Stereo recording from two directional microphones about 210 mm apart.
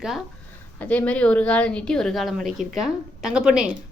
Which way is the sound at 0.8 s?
5° left (ahead or behind).